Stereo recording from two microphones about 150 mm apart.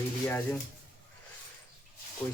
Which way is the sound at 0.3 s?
15° left (ahead or behind).